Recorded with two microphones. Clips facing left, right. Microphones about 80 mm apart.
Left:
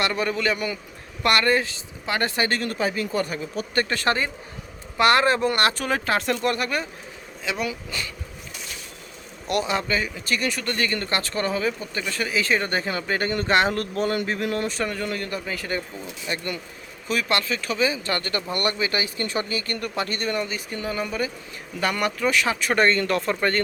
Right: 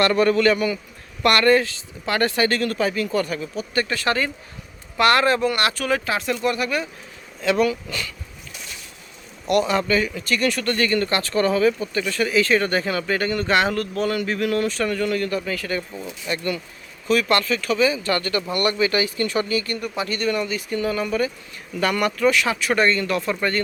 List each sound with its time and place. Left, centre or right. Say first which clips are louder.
0.0 s a man's voice: right 7 dB; centre; by 6.8 s left
7.4 s a man's voice: right 9 dB; centre
7.7 s speech: right 4 dB; left
9.5 s speech: right 5 dB; left